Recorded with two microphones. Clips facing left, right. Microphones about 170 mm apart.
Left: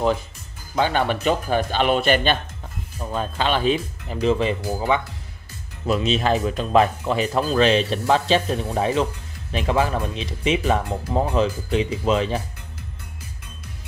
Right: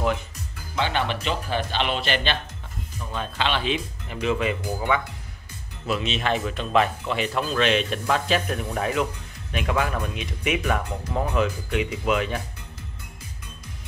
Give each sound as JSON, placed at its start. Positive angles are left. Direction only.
{"t": 0.7, "sound": "speech", "side_deg": 45}